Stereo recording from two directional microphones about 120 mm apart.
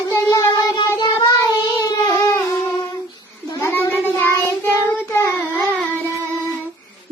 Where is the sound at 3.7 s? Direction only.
15° left (ahead or behind).